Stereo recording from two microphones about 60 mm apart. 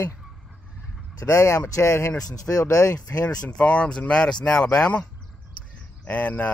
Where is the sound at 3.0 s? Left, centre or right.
Left.